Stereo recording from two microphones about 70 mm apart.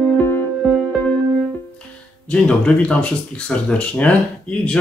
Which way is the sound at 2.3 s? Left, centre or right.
Centre.